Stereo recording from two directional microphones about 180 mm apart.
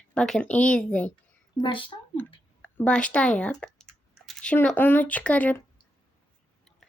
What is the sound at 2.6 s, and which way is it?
Speech, 10° left (ahead or behind).